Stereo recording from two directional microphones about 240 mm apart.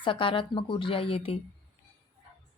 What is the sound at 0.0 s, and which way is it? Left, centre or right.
A woman's voice, left.